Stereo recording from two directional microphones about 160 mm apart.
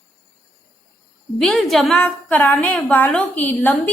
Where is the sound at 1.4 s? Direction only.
Centre (ahead or behind).